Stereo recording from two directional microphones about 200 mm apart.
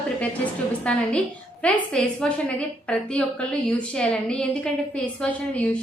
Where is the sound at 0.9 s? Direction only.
5° left (ahead or behind).